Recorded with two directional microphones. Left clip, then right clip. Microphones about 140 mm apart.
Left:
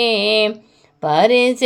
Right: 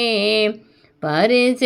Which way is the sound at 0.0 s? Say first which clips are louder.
Left 2 dB; 15° left (ahead or behind).